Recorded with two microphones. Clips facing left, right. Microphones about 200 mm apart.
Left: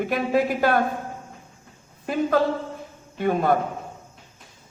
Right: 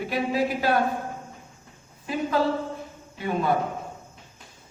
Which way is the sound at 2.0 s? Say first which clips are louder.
Left 3 dB; 50° left (ahead or behind).